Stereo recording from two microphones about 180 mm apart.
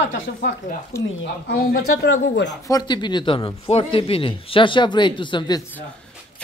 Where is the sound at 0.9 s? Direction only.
15° left (ahead or behind).